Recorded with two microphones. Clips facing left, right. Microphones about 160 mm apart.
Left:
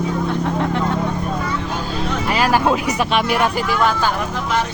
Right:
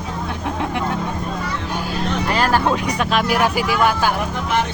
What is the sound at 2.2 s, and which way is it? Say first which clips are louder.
Speech: left 2 dB; 10° left (ahead or behind).